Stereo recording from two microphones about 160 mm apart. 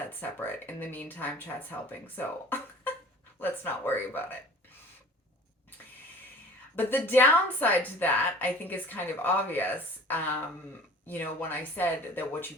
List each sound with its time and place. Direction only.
0.1 s a woman's voice: 10° left (ahead or behind)
6.7 s a woman's voice: 10° left (ahead or behind)